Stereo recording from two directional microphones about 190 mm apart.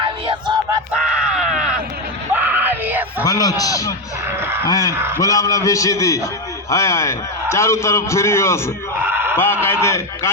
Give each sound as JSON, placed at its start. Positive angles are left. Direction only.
{"t": 0.0, "sound": "a sound", "side_deg": -25}
{"t": 0.9, "sound": "groan", "side_deg": -5}
{"t": 2.3, "sound": "yell", "side_deg": -10}
{"t": 3.2, "sound": "a man's voice", "side_deg": 20}
{"t": 4.4, "sound": "a sound", "side_deg": -10}
{"t": 4.7, "sound": "a man's voice", "side_deg": 15}
{"t": 4.9, "sound": "a man's voice", "side_deg": -10}
{"t": 5.2, "sound": "a man's voice", "side_deg": 15}
{"t": 9.0, "sound": "a sound", "side_deg": -10}
{"t": 9.8, "sound": "a man's voice", "side_deg": 15}